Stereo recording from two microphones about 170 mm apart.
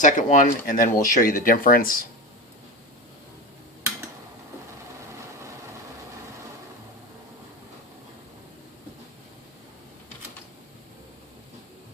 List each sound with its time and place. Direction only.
0.0 s speech: 50° left (ahead or behind)